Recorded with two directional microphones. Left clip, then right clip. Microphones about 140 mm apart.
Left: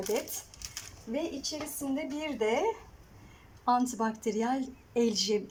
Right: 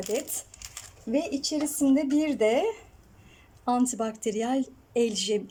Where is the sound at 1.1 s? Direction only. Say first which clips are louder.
Right 7 dB; 35° right (ahead or behind).